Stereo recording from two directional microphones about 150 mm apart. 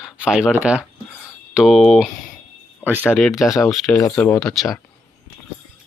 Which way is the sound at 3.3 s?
20° left (ahead or behind).